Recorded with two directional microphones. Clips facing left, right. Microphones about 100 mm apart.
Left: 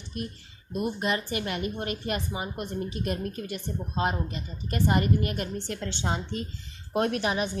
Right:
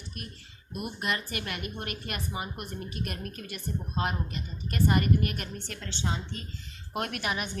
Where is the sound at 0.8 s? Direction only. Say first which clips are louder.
Left 5 dB; 30° left (ahead or behind).